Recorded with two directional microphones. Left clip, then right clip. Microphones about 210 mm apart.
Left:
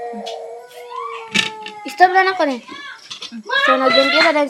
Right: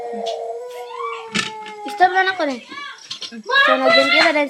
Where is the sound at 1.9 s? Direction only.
15° left (ahead or behind).